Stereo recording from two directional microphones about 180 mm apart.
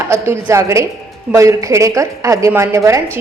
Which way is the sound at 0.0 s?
15° right (ahead or behind).